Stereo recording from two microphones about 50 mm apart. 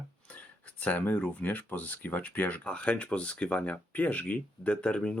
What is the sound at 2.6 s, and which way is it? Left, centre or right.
Speech, left.